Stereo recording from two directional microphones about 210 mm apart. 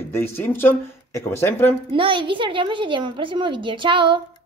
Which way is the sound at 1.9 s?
25° right (ahead or behind).